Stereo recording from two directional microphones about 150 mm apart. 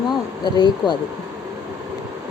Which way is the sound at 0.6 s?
30° left (ahead or behind).